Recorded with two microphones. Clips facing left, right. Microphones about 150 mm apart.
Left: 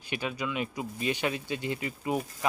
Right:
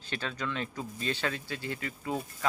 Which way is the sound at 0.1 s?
15° left (ahead or behind).